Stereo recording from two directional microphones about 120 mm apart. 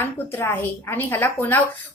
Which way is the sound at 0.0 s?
15° left (ahead or behind).